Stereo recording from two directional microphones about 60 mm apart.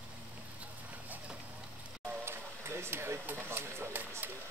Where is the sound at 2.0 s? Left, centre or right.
Right.